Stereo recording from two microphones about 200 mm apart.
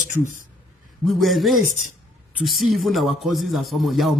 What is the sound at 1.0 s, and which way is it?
A man's voice, centre (ahead or behind).